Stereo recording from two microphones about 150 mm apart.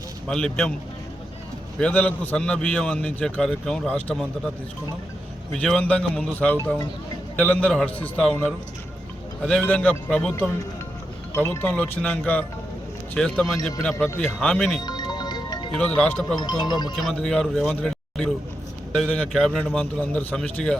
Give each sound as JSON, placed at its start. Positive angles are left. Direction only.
{"t": 0.3, "sound": "a man's voice", "side_deg": 5}
{"t": 1.8, "sound": "a man's voice", "side_deg": 10}
{"t": 5.6, "sound": "a man's voice", "side_deg": 10}
{"t": 11.3, "sound": "a man's voice", "side_deg": 15}
{"t": 14.8, "sound": "music", "side_deg": 25}
{"t": 15.7, "sound": "a man's voice", "side_deg": 10}
{"t": 16.4, "sound": "speech", "side_deg": 30}
{"t": 16.9, "sound": "a man's voice", "side_deg": 0}